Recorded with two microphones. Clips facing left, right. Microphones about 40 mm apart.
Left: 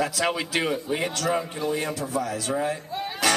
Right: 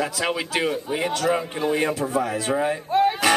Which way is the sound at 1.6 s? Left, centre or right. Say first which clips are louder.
Right 5 dB; right.